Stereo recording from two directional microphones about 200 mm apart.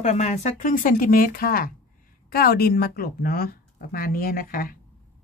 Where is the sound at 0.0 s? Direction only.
35° left (ahead or behind).